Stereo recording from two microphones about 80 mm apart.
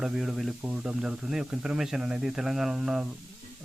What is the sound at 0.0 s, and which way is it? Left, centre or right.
Speech, centre.